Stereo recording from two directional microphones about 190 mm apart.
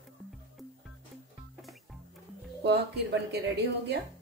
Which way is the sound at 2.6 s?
65° right (ahead or behind).